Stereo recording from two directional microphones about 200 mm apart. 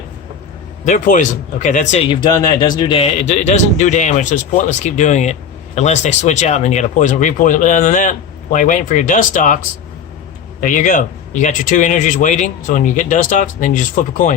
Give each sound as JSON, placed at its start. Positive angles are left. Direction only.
{"t": 0.9, "sound": "speech", "side_deg": 40}
{"t": 10.6, "sound": "speech", "side_deg": 40}